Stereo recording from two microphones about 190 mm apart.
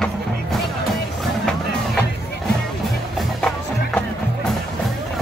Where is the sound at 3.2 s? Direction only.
5° left (ahead or behind).